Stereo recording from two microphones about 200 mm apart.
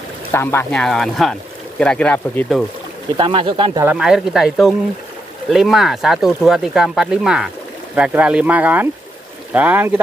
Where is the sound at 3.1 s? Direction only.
25° right (ahead or behind).